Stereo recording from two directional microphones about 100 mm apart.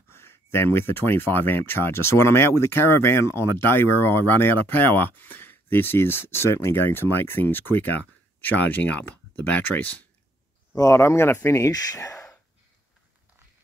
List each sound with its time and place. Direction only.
0.1 s speech: 25° left (ahead or behind)
10.8 s speech: 30° left (ahead or behind)